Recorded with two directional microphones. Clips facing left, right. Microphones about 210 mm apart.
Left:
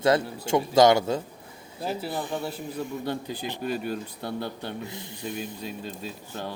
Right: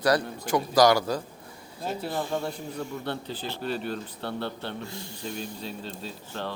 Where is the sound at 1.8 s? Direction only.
5° left (ahead or behind).